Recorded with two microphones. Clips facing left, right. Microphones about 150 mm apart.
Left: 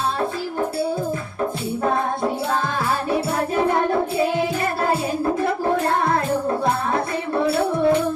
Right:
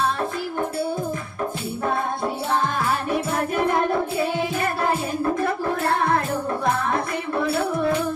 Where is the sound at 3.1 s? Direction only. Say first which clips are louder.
Left 2 dB; 35° left (ahead or behind).